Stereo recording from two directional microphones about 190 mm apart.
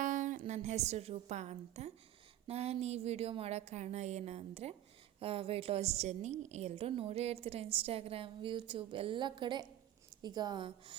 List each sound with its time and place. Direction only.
0.0 s a woman's voice: 40° right (ahead or behind); by 10.9 s 25° right (ahead or behind)